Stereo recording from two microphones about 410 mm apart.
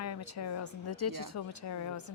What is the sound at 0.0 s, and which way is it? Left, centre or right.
A woman's voice, left.